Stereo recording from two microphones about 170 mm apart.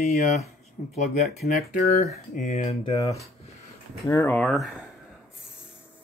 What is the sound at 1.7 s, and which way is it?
Speech, 60° left (ahead or behind).